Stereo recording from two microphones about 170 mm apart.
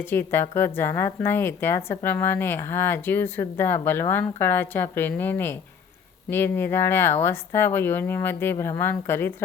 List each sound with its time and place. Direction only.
0.0 s speech: 10° left (ahead or behind)